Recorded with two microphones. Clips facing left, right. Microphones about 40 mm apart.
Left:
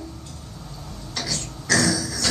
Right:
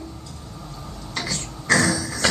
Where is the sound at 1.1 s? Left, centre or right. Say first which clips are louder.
Right 1 dB; right.